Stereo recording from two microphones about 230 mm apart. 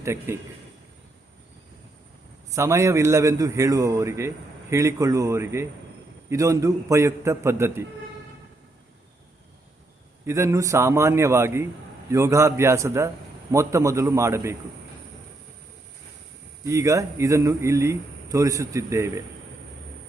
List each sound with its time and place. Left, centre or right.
0.0 s a man's voice: centre
2.5 s a man's voice: centre
10.2 s a man's voice: centre
16.6 s a man's voice: centre